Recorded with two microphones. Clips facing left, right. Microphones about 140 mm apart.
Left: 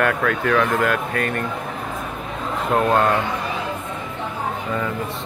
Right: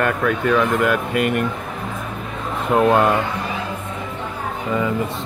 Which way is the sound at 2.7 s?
10° right (ahead or behind).